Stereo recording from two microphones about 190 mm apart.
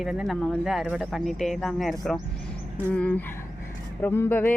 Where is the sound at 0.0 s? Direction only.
Centre (ahead or behind).